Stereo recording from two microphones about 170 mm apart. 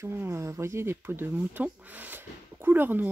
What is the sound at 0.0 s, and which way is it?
Speech, 15° right (ahead or behind).